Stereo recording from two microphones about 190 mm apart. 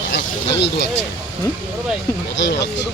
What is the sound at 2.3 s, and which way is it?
Speech, 65° left (ahead or behind).